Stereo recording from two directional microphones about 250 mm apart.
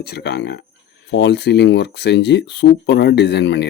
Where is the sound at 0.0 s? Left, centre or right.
Left.